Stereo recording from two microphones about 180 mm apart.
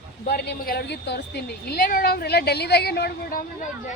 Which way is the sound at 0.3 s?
60° left (ahead or behind).